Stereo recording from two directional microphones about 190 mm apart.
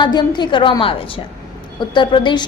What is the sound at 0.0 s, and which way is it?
A woman's voice, 25° left (ahead or behind).